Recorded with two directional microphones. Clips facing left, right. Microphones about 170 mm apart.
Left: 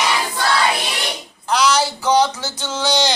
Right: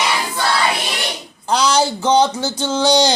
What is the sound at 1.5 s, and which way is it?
Speech, 30° right (ahead or behind).